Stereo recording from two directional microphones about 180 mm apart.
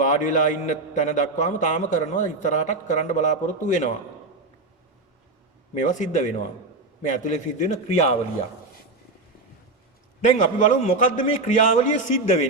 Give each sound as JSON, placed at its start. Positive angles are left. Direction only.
{"t": 0.0, "sound": "a man's voice", "side_deg": 45}
{"t": 5.8, "sound": "a man's voice", "side_deg": 45}
{"t": 10.2, "sound": "a man's voice", "side_deg": 45}